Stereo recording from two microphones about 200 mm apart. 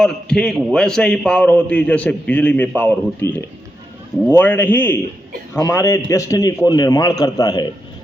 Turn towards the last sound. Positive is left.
turn(degrees=20)  # may be behind; listen again after turning